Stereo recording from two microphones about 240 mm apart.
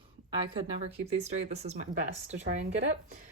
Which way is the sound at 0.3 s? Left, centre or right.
Right.